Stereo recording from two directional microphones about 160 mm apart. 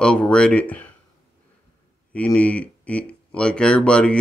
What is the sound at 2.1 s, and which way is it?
Speech, 10° left (ahead or behind).